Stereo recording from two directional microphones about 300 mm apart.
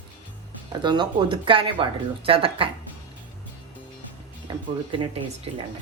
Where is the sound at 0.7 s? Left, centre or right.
Centre.